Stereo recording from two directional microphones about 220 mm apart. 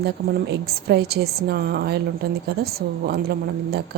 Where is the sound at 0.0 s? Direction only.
45° right (ahead or behind).